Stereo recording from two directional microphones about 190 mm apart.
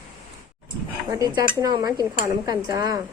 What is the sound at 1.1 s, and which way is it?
Dishes, 15° right (ahead or behind).